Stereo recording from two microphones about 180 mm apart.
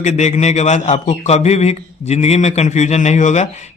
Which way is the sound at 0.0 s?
40° left (ahead or behind).